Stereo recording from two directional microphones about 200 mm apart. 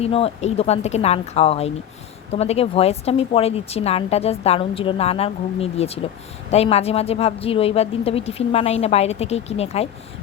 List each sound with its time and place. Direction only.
0.0 s speech: 30° left (ahead or behind)